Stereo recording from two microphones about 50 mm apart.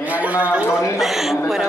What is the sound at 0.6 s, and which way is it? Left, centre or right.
Speech, left.